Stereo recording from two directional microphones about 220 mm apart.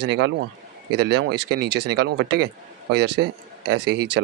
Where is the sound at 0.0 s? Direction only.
50° right (ahead or behind).